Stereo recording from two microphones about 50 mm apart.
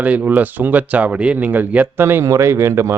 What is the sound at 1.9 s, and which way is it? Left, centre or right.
Speech, right.